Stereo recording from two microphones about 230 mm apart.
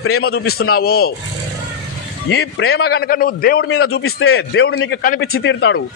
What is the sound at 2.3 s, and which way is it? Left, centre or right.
A man's voice, left.